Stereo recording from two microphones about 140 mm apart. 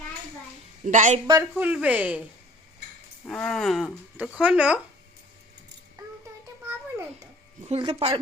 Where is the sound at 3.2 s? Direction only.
5° left (ahead or behind).